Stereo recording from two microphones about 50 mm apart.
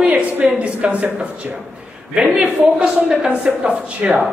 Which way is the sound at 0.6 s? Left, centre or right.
Right.